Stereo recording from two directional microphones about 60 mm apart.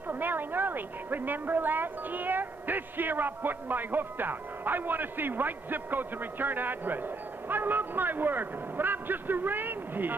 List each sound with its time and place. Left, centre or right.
0.1 s a woman's voice: right